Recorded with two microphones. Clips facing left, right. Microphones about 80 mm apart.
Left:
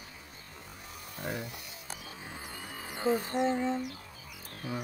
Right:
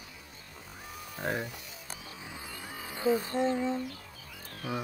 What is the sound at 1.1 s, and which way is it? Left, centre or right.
Music, right.